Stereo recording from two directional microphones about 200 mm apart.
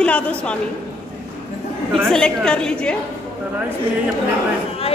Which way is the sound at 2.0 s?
5° left (ahead or behind).